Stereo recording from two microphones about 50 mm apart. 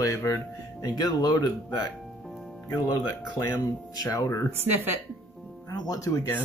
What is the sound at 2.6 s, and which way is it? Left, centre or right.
Speech, left.